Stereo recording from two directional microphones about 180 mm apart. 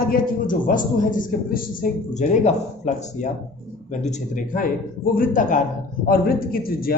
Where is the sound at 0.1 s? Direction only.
50° left (ahead or behind).